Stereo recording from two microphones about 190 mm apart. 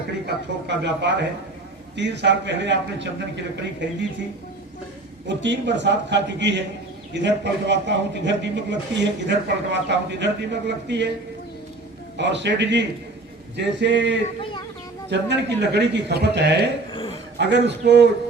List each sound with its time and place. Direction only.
0.3 s a man's voice: 65° right (ahead or behind)
5.3 s a man's voice: 70° right (ahead or behind)
12.1 s a man's voice: 65° right (ahead or behind)
16.9 s a sound: 30° left (ahead or behind)
17.3 s speech: 65° right (ahead or behind)